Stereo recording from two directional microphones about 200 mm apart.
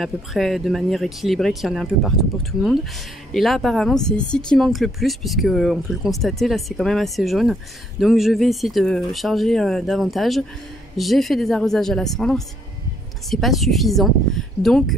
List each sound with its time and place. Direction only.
0.0 s speech: centre (ahead or behind)